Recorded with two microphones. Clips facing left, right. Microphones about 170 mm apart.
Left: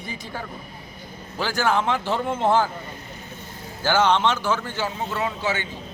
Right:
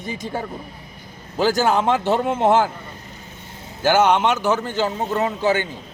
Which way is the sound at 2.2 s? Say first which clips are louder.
Right 2 dB; 20° right (ahead or behind).